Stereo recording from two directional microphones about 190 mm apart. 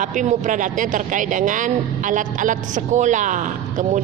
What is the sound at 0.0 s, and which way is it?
Speech, 40° right (ahead or behind).